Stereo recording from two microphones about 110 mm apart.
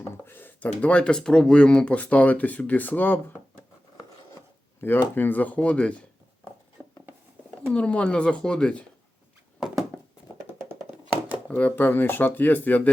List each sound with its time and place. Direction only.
0.0 s speech: 20° left (ahead or behind)
4.8 s speech: 20° left (ahead or behind)
6.8 s a sound: 15° left (ahead or behind)
7.7 s speech: 10° left (ahead or behind)
9.9 s a sound: 15° left (ahead or behind)
11.4 s speech: 10° left (ahead or behind)